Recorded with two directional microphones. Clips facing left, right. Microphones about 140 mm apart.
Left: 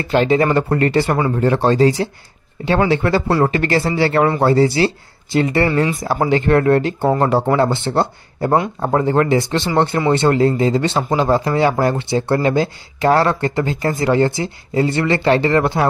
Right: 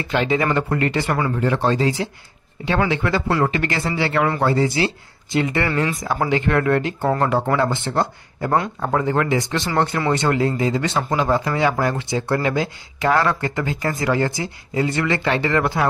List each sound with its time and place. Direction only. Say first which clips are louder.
0.1 s speech: left 5 dB; 35° left (ahead or behind)